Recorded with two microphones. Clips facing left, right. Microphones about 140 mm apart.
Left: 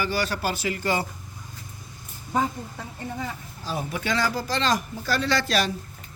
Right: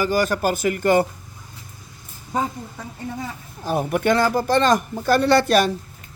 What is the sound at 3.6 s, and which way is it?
A man's voice, 55° right (ahead or behind).